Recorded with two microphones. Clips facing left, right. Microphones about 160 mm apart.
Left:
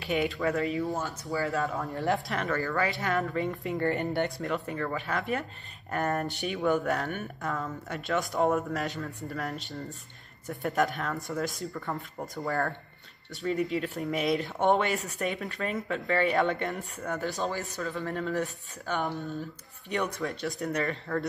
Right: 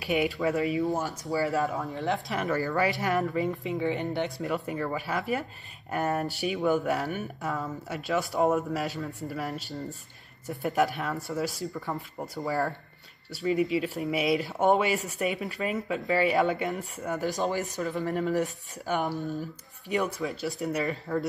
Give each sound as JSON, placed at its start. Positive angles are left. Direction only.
{"t": 0.0, "sound": "speech", "side_deg": -10}
{"t": 1.7, "sound": "speech", "side_deg": 0}
{"t": 2.5, "sound": "speech", "side_deg": -15}
{"t": 3.3, "sound": "speech", "side_deg": 0}
{"t": 4.6, "sound": "speech", "side_deg": -10}
{"t": 17.1, "sound": "speech", "side_deg": -15}
{"t": 19.9, "sound": "speech", "side_deg": -5}